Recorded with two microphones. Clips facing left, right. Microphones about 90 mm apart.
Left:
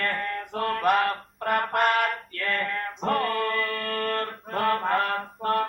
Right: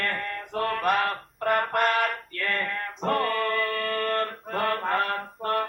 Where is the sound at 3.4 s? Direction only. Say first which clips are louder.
Right 1 dB; 40° right (ahead or behind).